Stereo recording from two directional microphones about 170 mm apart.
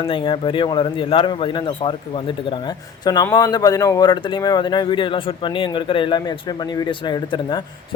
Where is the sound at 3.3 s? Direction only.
25° left (ahead or behind).